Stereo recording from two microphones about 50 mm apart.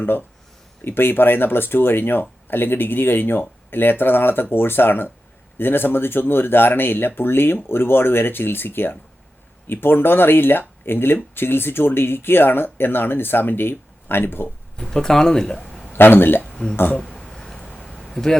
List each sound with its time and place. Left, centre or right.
0.9 s speech: left
14.8 s speech: centre
15.9 s speech: left
17.0 s a sound: centre
18.1 s speech: centre